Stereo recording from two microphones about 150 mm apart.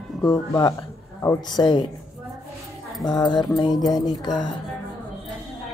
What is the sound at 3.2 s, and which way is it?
Speech, 25° left (ahead or behind).